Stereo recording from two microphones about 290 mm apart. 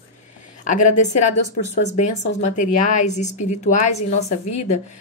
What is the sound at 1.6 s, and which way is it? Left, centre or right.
A woman's voice, left.